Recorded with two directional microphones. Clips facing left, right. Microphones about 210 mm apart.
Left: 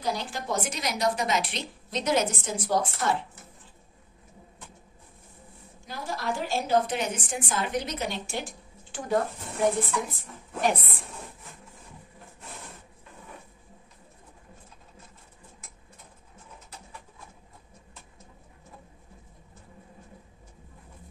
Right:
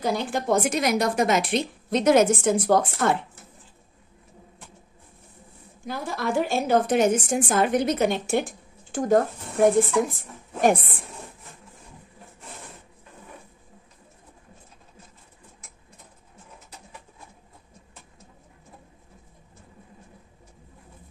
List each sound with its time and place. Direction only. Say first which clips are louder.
0.0 s a woman's voice: right 6 dB; 55° right (ahead or behind)
5.9 s a woman's voice: right 4 dB; 55° right (ahead or behind)